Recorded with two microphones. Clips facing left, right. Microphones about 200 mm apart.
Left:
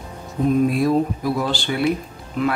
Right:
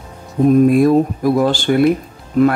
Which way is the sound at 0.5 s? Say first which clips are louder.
Right 7 dB; 50° right (ahead or behind).